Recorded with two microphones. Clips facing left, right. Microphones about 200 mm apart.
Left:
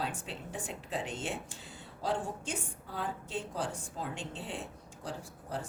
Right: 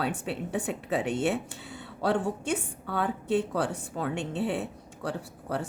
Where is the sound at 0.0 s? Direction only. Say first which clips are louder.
Right 8 dB; 65° right (ahead or behind).